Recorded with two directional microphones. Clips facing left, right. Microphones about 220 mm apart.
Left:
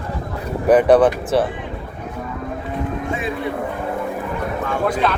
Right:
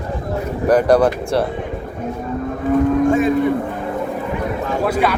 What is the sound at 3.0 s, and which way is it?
Cattle, 45° right (ahead or behind).